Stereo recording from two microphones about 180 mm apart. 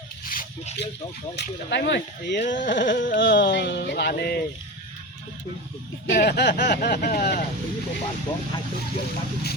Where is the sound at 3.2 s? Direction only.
70° left (ahead or behind).